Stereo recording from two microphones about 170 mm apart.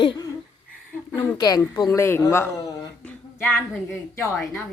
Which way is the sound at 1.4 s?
25° left (ahead or behind).